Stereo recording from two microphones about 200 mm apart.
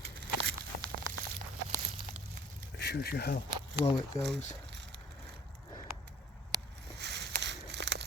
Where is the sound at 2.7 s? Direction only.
55° left (ahead or behind).